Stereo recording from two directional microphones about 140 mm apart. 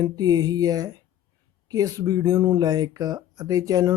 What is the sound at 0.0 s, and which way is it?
Speech, 30° right (ahead or behind).